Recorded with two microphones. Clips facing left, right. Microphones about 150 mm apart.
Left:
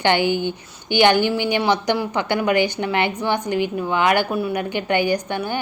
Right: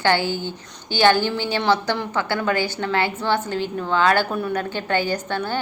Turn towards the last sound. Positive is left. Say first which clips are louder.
# left 2 dB
turn(degrees=15)  # may be behind; listen again after turning